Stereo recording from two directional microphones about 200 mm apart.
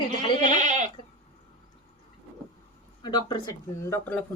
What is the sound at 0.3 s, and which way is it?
Goat, 35° right (ahead or behind).